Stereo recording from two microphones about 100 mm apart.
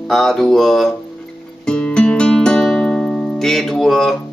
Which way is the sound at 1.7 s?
10° left (ahead or behind).